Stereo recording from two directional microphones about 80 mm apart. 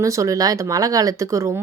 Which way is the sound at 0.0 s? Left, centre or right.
Right.